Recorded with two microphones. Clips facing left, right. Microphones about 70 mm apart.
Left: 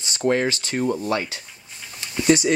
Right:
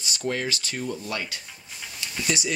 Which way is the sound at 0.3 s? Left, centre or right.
Left.